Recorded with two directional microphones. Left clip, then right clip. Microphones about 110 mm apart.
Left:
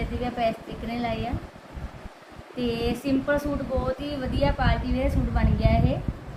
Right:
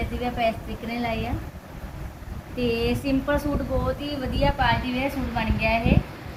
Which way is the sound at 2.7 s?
15° right (ahead or behind).